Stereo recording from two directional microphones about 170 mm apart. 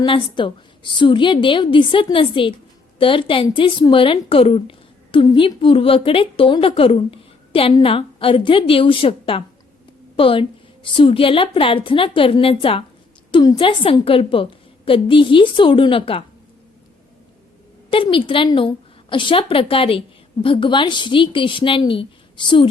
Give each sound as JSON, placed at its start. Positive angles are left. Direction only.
{"t": 0.0, "sound": "a woman's voice", "side_deg": 30}
{"t": 17.9, "sound": "a woman's voice", "side_deg": 30}